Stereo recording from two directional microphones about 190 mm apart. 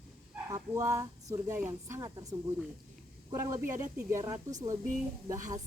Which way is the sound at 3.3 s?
15° right (ahead or behind).